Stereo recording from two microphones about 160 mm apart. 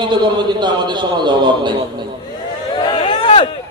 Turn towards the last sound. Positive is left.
turn(degrees=30)  # may be behind; listen again after turning